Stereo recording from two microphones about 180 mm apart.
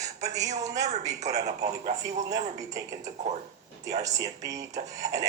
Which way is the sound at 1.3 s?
40° right (ahead or behind).